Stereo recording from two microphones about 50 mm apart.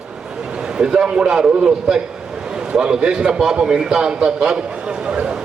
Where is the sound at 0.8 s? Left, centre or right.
Centre.